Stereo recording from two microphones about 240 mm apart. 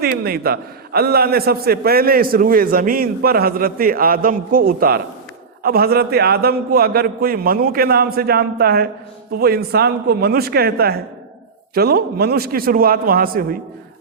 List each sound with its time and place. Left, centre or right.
0.0 s a man's voice: right